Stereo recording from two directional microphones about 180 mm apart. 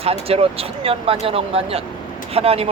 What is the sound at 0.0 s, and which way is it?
Speech, 35° right (ahead or behind).